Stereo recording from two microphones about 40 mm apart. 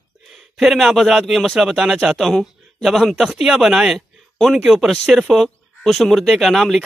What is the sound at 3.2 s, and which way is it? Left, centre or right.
Speech, centre.